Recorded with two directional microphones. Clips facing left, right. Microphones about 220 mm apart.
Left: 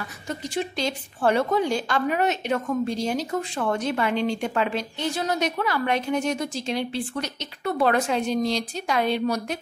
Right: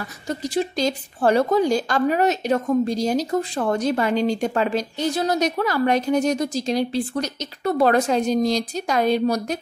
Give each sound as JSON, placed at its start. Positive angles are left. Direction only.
{"t": 0.3, "sound": "a woman's voice", "side_deg": -35}